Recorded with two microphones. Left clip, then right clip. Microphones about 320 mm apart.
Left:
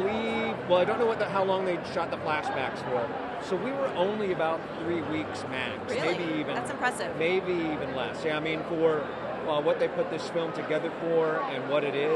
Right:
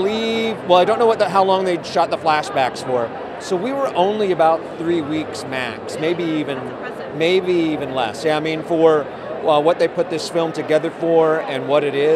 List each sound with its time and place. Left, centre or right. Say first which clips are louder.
0.0 s speech: right 9 dB; right